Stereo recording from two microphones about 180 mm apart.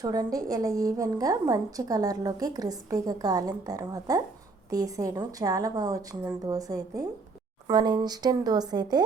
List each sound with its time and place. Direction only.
0.0 s a woman's voice: 20° right (ahead or behind)